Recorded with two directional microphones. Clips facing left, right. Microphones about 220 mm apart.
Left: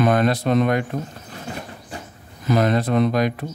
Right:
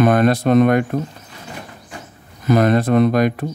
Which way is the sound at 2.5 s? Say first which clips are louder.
Right 4 dB; 55° right (ahead or behind).